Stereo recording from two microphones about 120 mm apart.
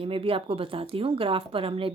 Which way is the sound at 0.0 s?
50° right (ahead or behind).